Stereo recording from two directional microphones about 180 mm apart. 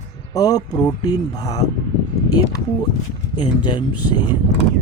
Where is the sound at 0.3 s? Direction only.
20° left (ahead or behind).